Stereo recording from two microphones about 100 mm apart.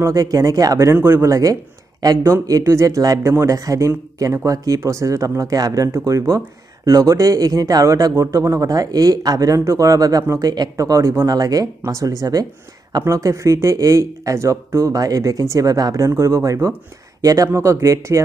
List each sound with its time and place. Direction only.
0.0 s speech: 35° right (ahead or behind)